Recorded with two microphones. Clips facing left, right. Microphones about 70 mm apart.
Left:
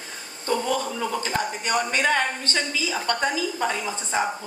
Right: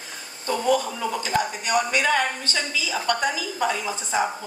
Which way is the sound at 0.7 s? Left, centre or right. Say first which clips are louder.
Right 1 dB; left.